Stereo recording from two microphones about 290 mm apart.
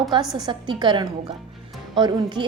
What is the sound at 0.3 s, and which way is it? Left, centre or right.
A woman's voice, centre.